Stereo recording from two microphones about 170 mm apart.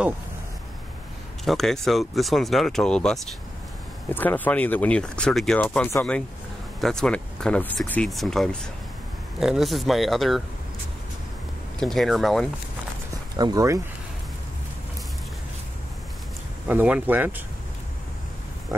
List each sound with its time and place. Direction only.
1.4 s speech: centre (ahead or behind)
11.8 s speech: centre (ahead or behind)
13.4 s speech: 20° right (ahead or behind)
16.6 s speech: 10° right (ahead or behind)